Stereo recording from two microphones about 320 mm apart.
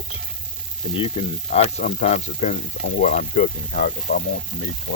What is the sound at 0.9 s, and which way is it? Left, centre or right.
Speech, centre.